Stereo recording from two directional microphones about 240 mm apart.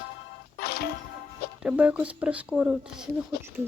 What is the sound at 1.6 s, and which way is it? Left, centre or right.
Speech, centre.